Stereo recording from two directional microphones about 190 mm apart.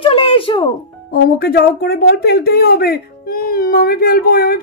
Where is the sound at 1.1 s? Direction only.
55° left (ahead or behind).